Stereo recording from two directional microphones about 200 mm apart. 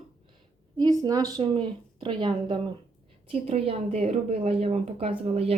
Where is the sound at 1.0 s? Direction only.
20° right (ahead or behind).